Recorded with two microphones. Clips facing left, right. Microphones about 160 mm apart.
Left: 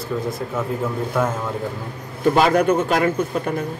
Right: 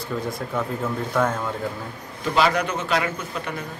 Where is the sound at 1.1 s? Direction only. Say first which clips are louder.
Even; 10° left (ahead or behind).